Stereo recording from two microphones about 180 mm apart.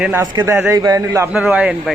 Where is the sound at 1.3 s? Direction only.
5° right (ahead or behind).